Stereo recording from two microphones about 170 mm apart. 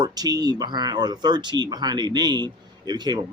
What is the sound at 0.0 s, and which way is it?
Speech, 25° right (ahead or behind).